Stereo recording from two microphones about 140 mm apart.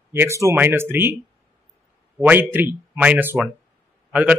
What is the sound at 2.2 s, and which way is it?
Speech, 10° right (ahead or behind).